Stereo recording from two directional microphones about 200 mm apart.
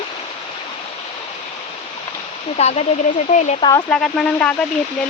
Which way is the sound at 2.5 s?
30° left (ahead or behind).